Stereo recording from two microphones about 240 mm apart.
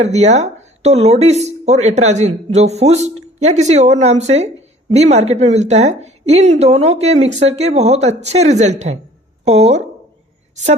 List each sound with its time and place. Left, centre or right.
0.0 s a woman's voice: right